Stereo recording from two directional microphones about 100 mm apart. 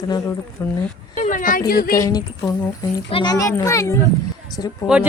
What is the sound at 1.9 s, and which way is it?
A woman's voice, 35° left (ahead or behind).